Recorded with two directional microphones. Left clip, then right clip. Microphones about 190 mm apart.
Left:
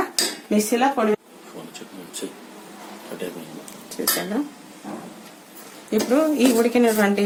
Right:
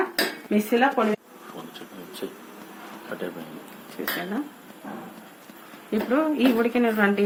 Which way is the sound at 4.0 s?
40° left (ahead or behind).